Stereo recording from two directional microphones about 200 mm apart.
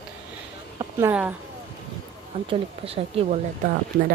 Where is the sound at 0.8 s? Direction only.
10° right (ahead or behind).